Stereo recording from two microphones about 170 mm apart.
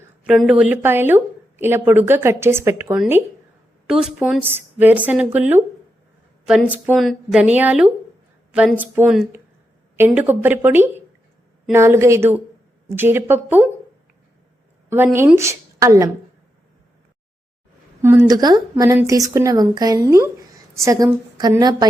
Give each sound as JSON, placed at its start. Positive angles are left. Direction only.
{"t": 0.3, "sound": "speech", "side_deg": -5}
{"t": 3.8, "sound": "speech", "side_deg": -5}
{"t": 6.7, "sound": "speech", "side_deg": -5}
{"t": 14.8, "sound": "a woman's voice", "side_deg": -15}
{"t": 18.0, "sound": "a woman's voice", "side_deg": -10}
{"t": 18.3, "sound": "speech", "side_deg": -25}